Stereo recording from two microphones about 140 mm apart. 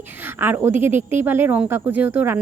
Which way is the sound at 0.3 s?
15° right (ahead or behind).